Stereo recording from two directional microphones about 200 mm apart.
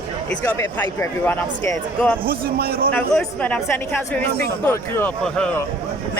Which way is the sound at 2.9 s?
10° left (ahead or behind).